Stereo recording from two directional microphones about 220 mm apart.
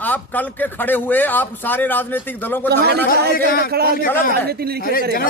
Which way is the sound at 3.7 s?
45° right (ahead or behind).